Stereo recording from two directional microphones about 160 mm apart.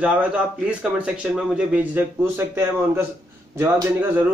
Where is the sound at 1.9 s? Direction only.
15° right (ahead or behind).